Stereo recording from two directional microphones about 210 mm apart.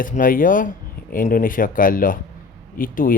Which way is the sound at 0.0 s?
40° left (ahead or behind).